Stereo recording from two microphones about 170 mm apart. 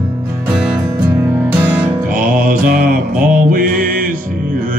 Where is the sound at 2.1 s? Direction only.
50° right (ahead or behind).